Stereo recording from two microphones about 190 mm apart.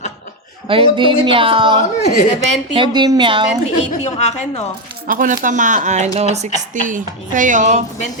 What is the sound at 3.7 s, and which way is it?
Speech, 35° left (ahead or behind).